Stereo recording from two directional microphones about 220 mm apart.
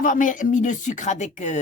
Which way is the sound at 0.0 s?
35° left (ahead or behind).